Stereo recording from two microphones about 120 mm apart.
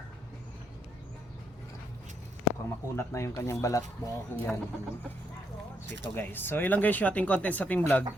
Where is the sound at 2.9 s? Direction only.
25° left (ahead or behind).